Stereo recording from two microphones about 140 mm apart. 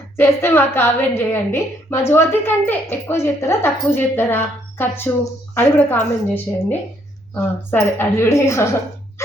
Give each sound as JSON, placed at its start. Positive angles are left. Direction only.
{"t": 0.2, "sound": "a woman's voice", "side_deg": 15}